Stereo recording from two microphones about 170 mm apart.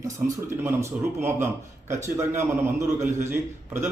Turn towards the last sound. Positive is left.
turn(degrees=-15)  # may be behind; listen again after turning